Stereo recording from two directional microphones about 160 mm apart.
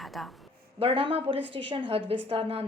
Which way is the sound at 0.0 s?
Centre (ahead or behind).